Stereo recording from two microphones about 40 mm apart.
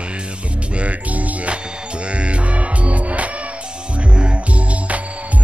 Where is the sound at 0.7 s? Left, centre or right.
Right.